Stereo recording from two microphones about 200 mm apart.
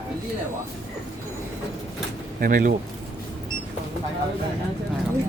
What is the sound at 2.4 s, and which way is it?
Speech, 45° right (ahead or behind).